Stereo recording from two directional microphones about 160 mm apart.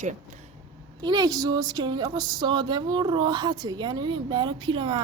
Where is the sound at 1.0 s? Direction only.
25° right (ahead or behind).